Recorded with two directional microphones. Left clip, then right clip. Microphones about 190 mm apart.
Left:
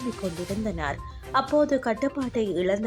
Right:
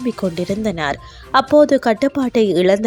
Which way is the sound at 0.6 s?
35° right (ahead or behind).